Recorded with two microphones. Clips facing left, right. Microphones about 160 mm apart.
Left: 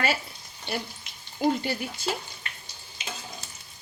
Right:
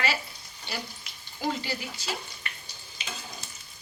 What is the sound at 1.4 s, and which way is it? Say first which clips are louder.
Speech: left 6 dB; 50° left (ahead or behind).